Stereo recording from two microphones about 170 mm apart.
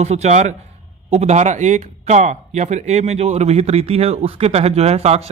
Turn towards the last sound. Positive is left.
turn(degrees=-40)  # may be behind; listen again after turning